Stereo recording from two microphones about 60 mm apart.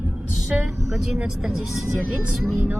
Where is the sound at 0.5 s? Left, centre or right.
Centre.